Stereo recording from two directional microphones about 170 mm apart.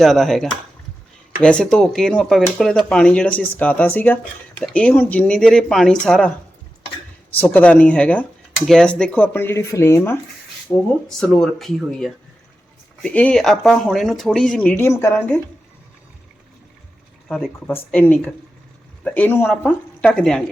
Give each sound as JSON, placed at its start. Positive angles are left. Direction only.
{"t": 0.0, "sound": "speech", "side_deg": 0}
{"t": 7.3, "sound": "speech", "side_deg": 10}
{"t": 17.2, "sound": "speech", "side_deg": 5}